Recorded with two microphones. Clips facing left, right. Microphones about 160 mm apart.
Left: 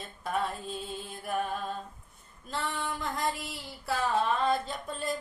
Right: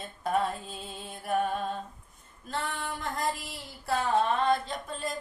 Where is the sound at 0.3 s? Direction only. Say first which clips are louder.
Right 2 dB; centre (ahead or behind).